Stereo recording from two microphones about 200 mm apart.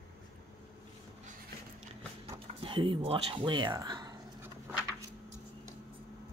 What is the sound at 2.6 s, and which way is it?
Speech, 25° right (ahead or behind).